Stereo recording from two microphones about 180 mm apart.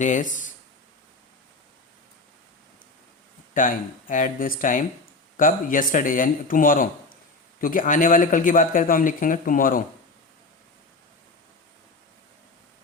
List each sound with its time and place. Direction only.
0.0 s a man's voice: 45° left (ahead or behind)
3.5 s a man's voice: 50° left (ahead or behind)